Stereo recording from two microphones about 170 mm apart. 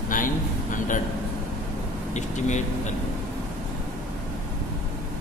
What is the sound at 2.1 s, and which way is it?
Speech, 45° left (ahead or behind).